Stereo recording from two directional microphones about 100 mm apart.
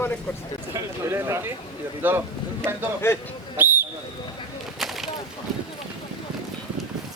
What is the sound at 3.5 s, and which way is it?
Whistle, 20° right (ahead or behind).